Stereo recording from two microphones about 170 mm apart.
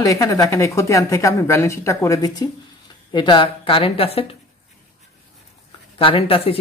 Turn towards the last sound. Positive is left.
turn(degrees=35)  # may be behind; listen again after turning